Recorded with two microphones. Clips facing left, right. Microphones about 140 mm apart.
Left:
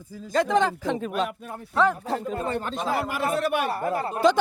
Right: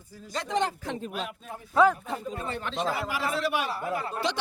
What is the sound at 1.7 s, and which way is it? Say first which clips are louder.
Speech: right 1 dB; 5° right (ahead or behind).